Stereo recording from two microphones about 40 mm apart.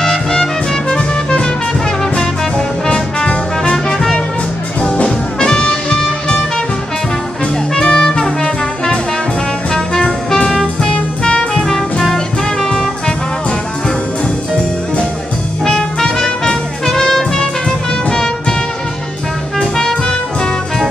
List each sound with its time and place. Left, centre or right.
0.0 s music: centre
3.7 s music: centre
4.8 s music: left
7.7 s music: centre
9.7 s brass instrument: centre
10.8 s music: left
11.6 s brass instrument: centre
15.6 s music: centre
19.6 s music: centre